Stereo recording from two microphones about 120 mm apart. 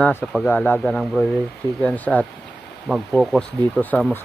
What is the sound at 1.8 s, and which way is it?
Speech, 15° left (ahead or behind).